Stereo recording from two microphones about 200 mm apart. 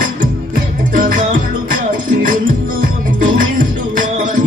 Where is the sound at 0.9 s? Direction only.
40° right (ahead or behind).